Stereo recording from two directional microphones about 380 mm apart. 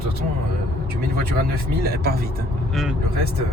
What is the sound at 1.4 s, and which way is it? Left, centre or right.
Speech, right.